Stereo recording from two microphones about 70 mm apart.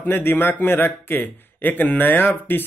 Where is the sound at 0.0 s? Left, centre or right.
Left.